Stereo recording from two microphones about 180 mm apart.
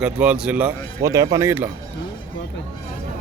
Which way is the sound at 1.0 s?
20° right (ahead or behind).